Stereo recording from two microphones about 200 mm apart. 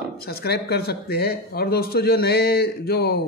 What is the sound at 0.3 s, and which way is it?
A man's voice, 55° left (ahead or behind).